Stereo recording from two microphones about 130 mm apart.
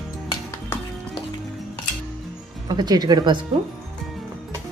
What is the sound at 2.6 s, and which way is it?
Speech, 30° right (ahead or behind).